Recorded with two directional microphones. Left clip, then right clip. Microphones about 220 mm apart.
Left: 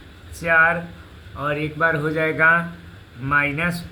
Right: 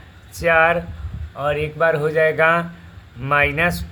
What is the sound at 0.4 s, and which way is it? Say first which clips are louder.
Speech: right 1 dB; 50° right (ahead or behind).